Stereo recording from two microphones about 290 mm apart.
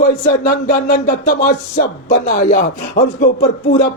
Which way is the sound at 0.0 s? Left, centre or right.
Left.